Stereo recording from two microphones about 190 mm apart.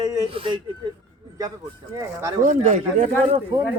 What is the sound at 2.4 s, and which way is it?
Speech, 40° right (ahead or behind).